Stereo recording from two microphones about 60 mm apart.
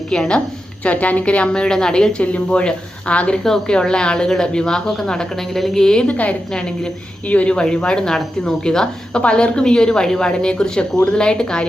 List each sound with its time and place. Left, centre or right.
0.1 s speech: centre
0.9 s speech: left